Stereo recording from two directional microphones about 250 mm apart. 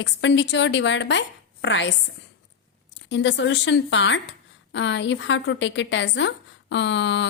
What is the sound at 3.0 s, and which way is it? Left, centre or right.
A woman's voice, left.